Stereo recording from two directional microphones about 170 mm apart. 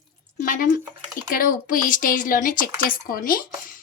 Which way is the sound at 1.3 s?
55° left (ahead or behind).